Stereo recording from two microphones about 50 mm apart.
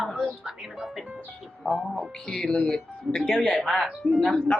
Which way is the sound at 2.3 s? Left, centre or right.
Centre.